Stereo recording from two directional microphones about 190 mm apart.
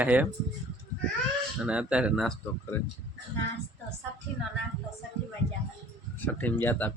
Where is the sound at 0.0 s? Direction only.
10° right (ahead or behind).